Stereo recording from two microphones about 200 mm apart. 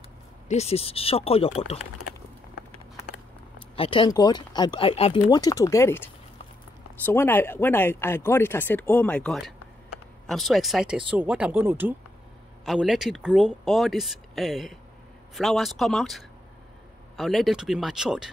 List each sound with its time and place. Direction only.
0.5 s speech: 30° left (ahead or behind)
3.7 s speech: 25° left (ahead or behind)
7.1 s speech: 10° left (ahead or behind)